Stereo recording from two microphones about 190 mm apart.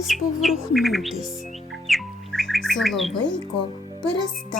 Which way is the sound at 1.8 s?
Centre (ahead or behind).